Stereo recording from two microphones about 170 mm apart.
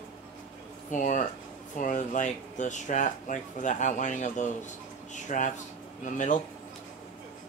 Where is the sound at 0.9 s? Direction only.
50° left (ahead or behind).